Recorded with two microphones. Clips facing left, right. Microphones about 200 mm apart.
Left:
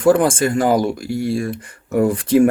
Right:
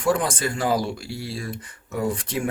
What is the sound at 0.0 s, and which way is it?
Speech, 50° left (ahead or behind).